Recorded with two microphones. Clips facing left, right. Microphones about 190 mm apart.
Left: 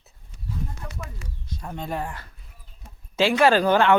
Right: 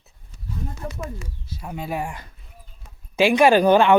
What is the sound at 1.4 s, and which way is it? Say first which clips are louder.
Speech: right 1 dB; 5° right (ahead or behind).